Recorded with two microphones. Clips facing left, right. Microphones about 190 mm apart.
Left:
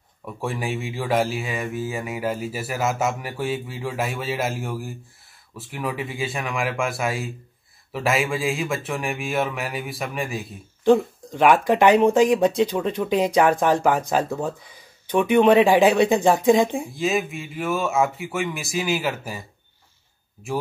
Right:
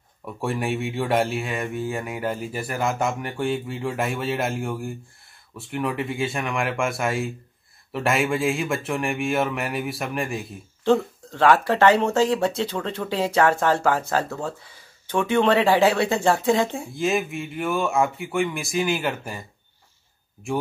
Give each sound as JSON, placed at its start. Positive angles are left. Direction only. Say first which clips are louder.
{"t": 0.4, "sound": "mantra", "louder": "right 2 dB", "side_deg": 0}
{"t": 10.8, "sound": "speech", "louder": "left 3 dB", "side_deg": 15}
{"t": 16.9, "sound": "mantra", "louder": "even", "side_deg": 0}